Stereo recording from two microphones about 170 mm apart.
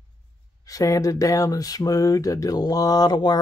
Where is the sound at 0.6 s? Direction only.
20° left (ahead or behind).